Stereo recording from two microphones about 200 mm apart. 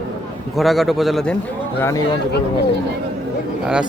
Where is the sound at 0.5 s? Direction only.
Centre (ahead or behind).